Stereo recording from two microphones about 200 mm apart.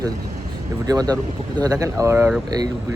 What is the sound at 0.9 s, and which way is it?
Speech, 20° right (ahead or behind).